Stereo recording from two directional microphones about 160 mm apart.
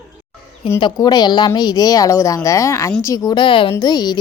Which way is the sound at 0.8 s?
25° left (ahead or behind).